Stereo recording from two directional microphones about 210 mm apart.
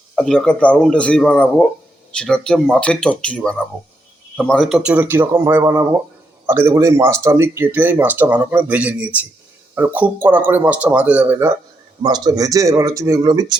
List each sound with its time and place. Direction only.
0.2 s speech: 5° left (ahead or behind); by 13.6 s 20° right (ahead or behind)